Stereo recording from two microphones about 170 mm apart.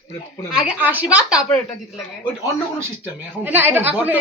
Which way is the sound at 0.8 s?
10° right (ahead or behind).